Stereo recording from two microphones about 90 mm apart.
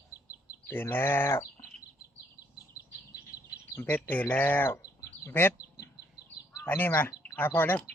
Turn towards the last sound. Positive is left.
turn(degrees=25)  # may be behind; listen again after turning